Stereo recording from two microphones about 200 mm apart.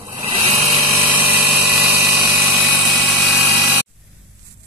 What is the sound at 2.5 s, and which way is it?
Vehicle, 5° right (ahead or behind).